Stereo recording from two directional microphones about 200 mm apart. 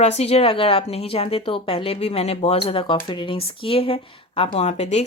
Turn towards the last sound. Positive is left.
turn(degrees=30)  # may be behind; listen again after turning